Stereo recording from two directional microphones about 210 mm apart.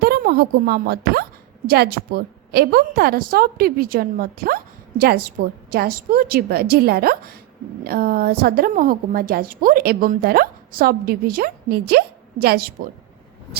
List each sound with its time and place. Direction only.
0.0 s a woman's voice: 45° right (ahead or behind)